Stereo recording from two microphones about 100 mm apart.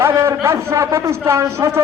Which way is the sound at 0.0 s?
25° right (ahead or behind).